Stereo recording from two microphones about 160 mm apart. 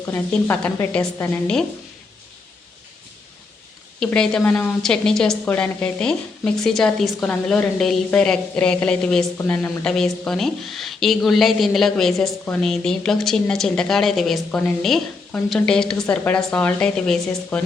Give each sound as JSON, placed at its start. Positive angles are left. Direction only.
{"t": 0.0, "sound": "a woman's voice", "side_deg": 15}
{"t": 4.0, "sound": "a woman's voice", "side_deg": 5}